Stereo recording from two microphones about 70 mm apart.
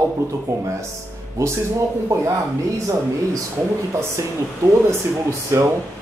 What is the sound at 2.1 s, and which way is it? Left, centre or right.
Speech, right.